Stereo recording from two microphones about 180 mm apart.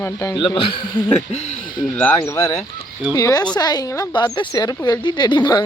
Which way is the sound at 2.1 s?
20° left (ahead or behind).